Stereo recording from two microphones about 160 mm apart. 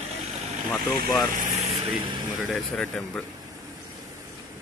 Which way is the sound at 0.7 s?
Centre (ahead or behind).